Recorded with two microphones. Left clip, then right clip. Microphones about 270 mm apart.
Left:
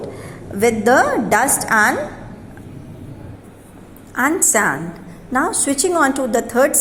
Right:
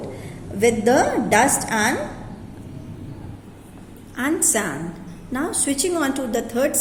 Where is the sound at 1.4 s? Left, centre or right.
Centre.